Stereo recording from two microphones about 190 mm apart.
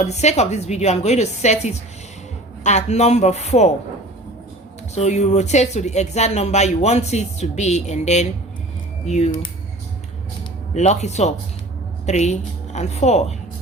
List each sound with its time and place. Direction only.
0.0 s a woman's voice: 35° left (ahead or behind)
4.9 s a woman's voice: 35° left (ahead or behind)
10.8 s a woman's voice: 35° left (ahead or behind)